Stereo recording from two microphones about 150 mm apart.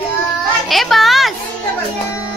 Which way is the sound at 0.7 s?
Centre (ahead or behind).